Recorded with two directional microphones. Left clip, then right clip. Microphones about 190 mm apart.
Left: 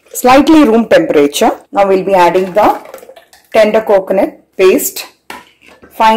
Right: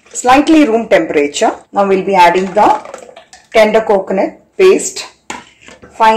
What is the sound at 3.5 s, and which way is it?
A woman's voice, 45° left (ahead or behind).